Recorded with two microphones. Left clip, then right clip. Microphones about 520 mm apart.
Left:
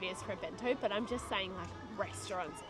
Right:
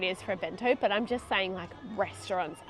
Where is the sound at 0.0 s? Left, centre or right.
Right.